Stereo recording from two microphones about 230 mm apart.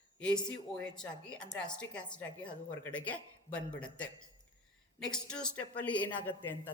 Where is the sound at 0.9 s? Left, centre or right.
Centre.